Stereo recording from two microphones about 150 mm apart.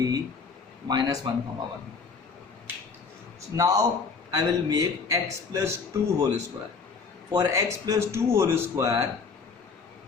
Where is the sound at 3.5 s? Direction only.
25° right (ahead or behind).